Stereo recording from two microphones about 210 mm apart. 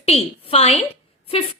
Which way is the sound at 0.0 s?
30° left (ahead or behind).